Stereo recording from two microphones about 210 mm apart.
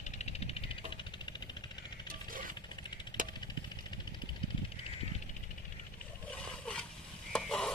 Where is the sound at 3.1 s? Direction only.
20° left (ahead or behind).